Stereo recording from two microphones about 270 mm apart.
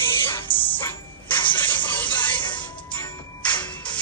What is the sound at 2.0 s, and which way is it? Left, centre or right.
Music, centre.